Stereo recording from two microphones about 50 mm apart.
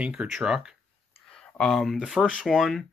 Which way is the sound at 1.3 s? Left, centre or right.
Centre.